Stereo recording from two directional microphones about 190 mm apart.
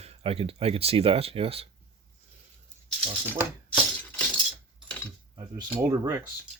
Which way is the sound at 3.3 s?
10° right (ahead or behind).